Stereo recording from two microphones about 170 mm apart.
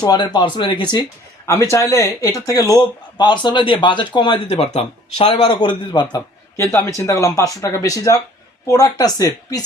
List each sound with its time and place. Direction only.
0.0 s speech: 25° left (ahead or behind)
1.5 s a man's voice: 15° left (ahead or behind)